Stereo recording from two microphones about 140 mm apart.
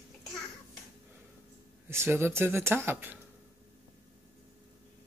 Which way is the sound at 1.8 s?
15° right (ahead or behind).